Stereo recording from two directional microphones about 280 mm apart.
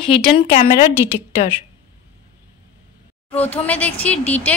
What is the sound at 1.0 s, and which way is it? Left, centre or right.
Speech, centre.